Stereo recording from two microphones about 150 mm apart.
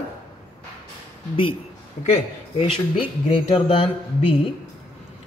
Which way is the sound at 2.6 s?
35° left (ahead or behind).